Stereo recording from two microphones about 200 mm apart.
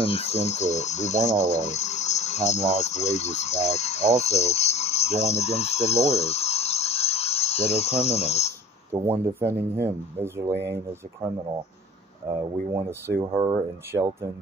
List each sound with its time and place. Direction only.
0.0 s speech: 30° left (ahead or behind)
8.9 s speech: 10° right (ahead or behind)
12.3 s speech: 15° right (ahead or behind)